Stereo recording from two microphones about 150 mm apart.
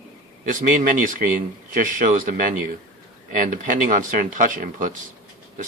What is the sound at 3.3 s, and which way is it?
Speech, 60° right (ahead or behind).